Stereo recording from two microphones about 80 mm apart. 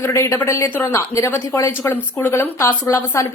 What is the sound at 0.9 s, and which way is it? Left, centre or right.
A woman's voice, left.